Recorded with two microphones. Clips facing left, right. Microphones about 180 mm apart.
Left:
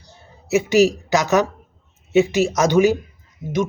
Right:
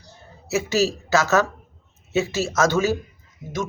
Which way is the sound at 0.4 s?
15° left (ahead or behind).